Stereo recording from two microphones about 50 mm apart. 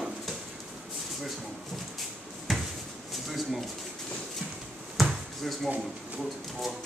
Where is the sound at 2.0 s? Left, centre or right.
Centre.